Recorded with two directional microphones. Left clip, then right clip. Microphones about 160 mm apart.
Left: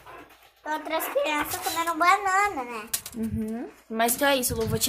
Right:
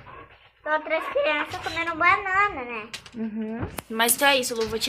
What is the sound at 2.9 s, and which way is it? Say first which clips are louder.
A woman's voice: left 1 dB; 30° left (ahead or behind).